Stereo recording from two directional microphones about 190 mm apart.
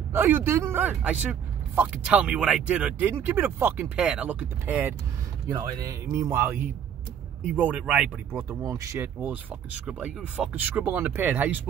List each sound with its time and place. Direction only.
0.1 s speech: 10° right (ahead or behind)